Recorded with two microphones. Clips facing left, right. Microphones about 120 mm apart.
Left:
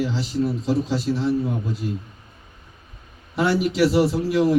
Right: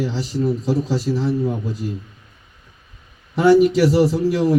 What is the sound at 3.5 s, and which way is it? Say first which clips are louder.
Speech: right 7 dB; 45° right (ahead or behind).